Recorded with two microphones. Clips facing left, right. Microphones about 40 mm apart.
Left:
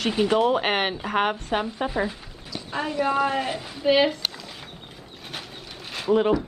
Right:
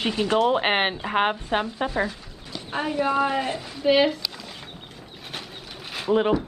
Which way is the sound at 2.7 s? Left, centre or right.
Right.